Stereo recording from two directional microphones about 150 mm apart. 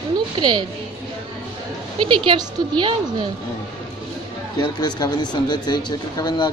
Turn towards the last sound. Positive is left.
turn(degrees=25)  # may be behind; listen again after turning